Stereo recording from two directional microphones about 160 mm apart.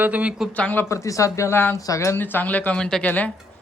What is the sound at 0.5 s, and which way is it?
Speech, 10° left (ahead or behind).